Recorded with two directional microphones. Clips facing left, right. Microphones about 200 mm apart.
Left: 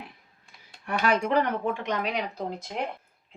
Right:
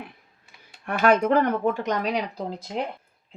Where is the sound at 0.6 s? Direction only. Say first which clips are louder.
Right 5 dB; 55° right (ahead or behind).